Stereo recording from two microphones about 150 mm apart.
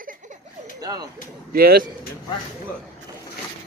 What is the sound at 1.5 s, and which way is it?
Speech, 90° right.